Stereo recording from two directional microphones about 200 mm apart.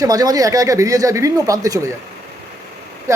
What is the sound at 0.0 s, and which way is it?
Speech, 20° right (ahead or behind).